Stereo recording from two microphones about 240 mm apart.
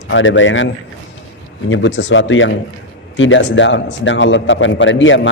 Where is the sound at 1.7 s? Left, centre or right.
Left.